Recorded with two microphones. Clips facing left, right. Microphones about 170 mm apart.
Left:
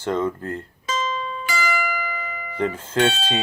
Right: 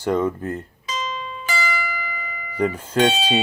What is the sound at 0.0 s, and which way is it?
Speech, 15° right (ahead or behind).